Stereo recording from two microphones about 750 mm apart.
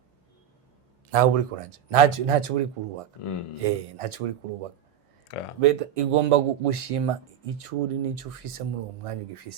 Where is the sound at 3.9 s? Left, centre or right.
Right.